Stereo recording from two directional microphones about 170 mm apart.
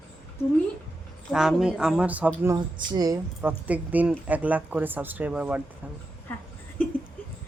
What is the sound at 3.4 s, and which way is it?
Speech, 10° right (ahead or behind).